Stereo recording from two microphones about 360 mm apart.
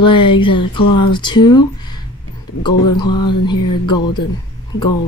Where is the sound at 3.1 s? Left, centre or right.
Centre.